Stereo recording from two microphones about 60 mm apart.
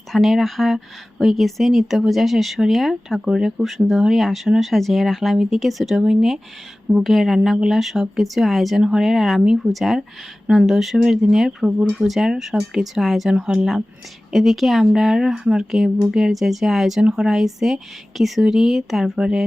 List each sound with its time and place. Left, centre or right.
0.1 s speech: centre
10.4 s speech: centre
10.7 s speech: centre
12.0 s speech: centre
13.3 s speech: centre
14.3 s speech: centre